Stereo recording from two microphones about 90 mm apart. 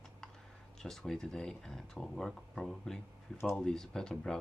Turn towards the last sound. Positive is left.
turn(degrees=5)  # may be behind; listen again after turning